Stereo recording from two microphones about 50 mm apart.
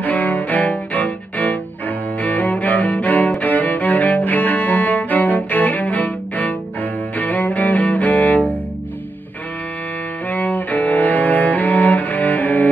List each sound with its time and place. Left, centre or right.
0.0 s cello: left
10.3 s cello: left